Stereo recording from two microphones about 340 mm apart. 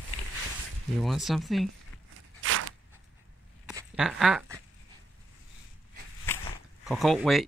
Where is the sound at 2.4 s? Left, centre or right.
Right.